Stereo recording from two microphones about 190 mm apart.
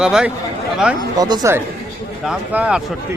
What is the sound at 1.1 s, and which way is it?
Speech, 20° right (ahead or behind).